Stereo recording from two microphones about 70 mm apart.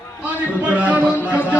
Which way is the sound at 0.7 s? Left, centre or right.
Right.